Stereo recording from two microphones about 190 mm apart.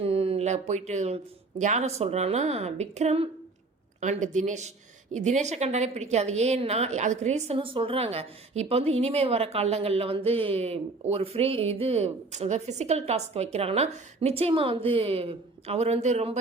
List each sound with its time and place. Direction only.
0.0 s a woman's voice: 30° right (ahead or behind)